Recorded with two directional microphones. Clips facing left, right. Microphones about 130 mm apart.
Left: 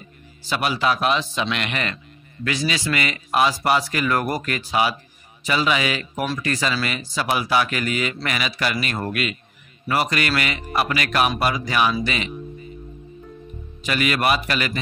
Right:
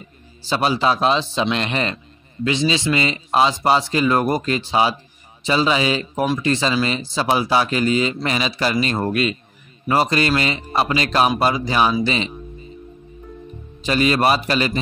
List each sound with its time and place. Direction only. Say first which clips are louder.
0.5 s speech: right 3 dB; 30° right (ahead or behind)
13.8 s speech: right 4 dB; 30° right (ahead or behind)